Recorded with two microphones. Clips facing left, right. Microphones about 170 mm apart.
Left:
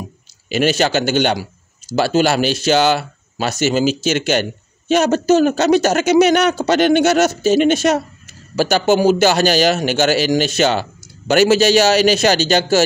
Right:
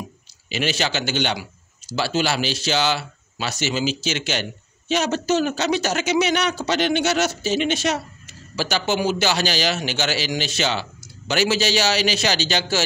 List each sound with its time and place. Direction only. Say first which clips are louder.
0.5 s a man's voice: left 8 dB; 45° left (ahead or behind)